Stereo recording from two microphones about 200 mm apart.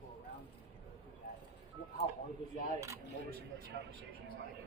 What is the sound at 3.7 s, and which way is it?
Speech, 35° left (ahead or behind).